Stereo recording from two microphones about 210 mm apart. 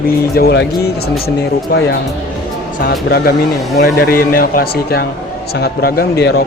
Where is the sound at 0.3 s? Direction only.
50° left (ahead or behind).